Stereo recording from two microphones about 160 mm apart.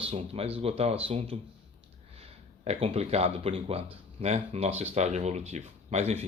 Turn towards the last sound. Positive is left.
turn(degrees=-45)  # may be behind; listen again after turning